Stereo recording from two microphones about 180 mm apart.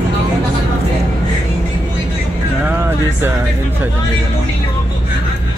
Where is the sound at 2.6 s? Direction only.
10° right (ahead or behind).